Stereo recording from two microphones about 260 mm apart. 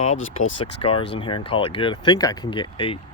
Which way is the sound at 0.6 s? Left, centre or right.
Left.